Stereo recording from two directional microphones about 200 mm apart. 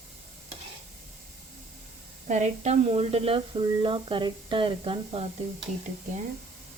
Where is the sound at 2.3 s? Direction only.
35° right (ahead or behind).